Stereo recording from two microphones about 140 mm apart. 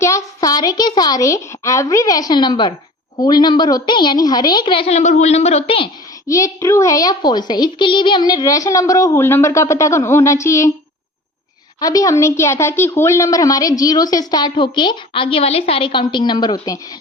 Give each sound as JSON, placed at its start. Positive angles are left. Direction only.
{"t": 0.0, "sound": "a woman's voice", "side_deg": 25}
{"t": 6.2, "sound": "a woman's voice", "side_deg": 25}
{"t": 11.8, "sound": "a woman's voice", "side_deg": 25}